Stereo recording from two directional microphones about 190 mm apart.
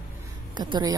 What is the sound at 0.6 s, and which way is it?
Speech, 20° right (ahead or behind).